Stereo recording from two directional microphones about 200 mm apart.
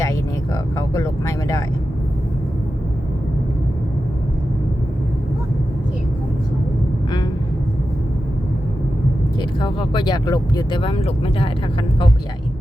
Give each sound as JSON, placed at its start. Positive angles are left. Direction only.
{"t": 9.4, "sound": "speech", "side_deg": 25}